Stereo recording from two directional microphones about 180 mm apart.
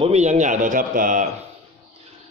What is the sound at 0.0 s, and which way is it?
Speech, 35° right (ahead or behind).